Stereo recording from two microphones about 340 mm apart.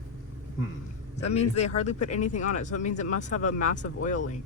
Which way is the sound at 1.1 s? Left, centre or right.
Centre.